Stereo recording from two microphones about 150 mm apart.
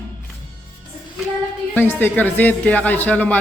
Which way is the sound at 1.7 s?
10° left (ahead or behind).